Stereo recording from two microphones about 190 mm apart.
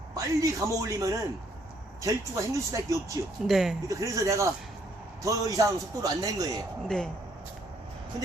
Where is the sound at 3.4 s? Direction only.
Centre (ahead or behind).